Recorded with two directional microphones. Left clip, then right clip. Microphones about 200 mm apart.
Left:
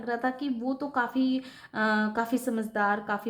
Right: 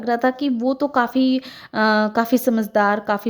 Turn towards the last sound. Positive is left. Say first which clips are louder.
# right 9 dB
turn(degrees=-40)  # may be behind; listen again after turning